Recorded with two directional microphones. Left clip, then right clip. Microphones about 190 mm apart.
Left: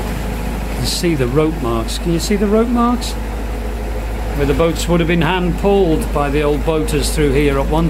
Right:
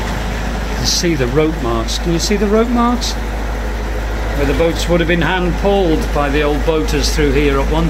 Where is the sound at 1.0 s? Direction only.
20° left (ahead or behind).